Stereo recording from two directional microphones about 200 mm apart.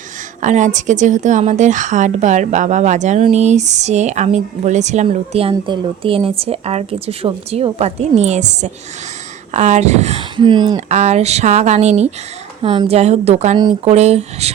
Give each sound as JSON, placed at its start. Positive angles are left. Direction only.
{"t": 0.4, "sound": "a woman's voice", "side_deg": -35}
{"t": 10.8, "sound": "a woman's voice", "side_deg": -35}